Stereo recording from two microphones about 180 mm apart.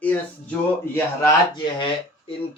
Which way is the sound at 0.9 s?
20° left (ahead or behind).